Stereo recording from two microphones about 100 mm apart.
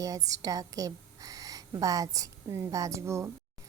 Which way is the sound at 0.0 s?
35° right (ahead or behind).